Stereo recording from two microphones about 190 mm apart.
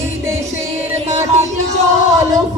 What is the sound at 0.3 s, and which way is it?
Music, 15° right (ahead or behind).